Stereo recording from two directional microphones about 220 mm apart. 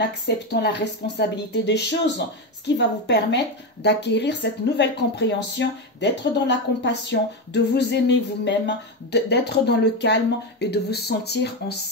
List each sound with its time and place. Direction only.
0.0 s speech: 50° left (ahead or behind)